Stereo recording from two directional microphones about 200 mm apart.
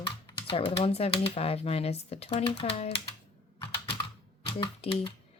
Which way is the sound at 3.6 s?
25° left (ahead or behind).